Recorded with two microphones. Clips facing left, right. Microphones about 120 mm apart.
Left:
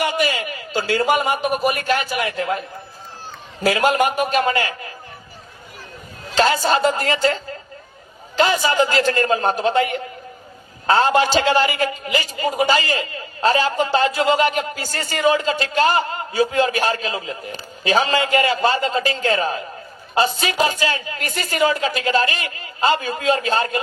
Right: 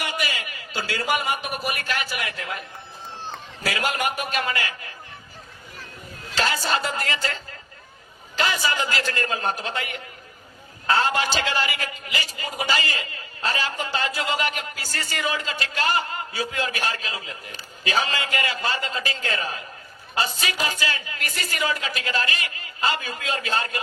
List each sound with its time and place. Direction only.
0.0 s a man's voice: 30° left (ahead or behind)
3.7 s a man's voice: 30° left (ahead or behind)
6.3 s a man's voice: 35° left (ahead or behind)
8.5 s a man's voice: 40° left (ahead or behind)